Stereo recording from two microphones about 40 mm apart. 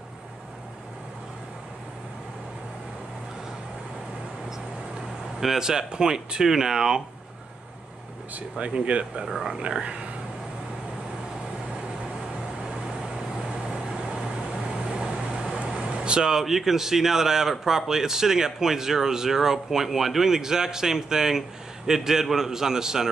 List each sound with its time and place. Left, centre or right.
5.4 s speech: centre
8.4 s speech: right
9.3 s speech: centre
9.6 s speech: right
14.9 s speech: centre